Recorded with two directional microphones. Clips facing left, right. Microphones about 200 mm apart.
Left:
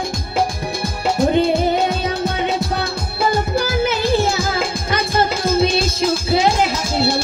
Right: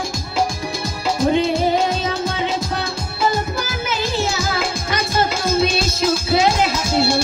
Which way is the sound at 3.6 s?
60° left (ahead or behind).